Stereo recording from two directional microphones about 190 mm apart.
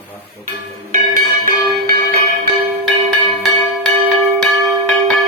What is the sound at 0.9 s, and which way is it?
Music, 45° right (ahead or behind).